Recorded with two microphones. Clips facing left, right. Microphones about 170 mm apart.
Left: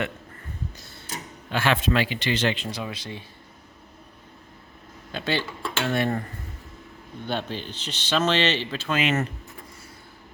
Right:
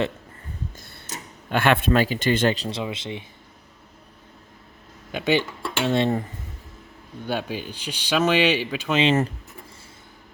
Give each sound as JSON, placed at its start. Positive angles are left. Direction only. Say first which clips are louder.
{"t": 0.8, "sound": "mechanisms", "louder": "even", "side_deg": -60}
{"t": 1.5, "sound": "a man's voice", "louder": "right 4 dB", "side_deg": -55}
{"t": 2.6, "sound": "speech", "louder": "right 4 dB", "side_deg": -25}
{"t": 5.1, "sound": "speech", "louder": "right 5 dB", "side_deg": -15}
{"t": 7.3, "sound": "speech", "louder": "right 2 dB", "side_deg": -10}
{"t": 9.0, "sound": "speech", "louder": "right 5 dB", "side_deg": -30}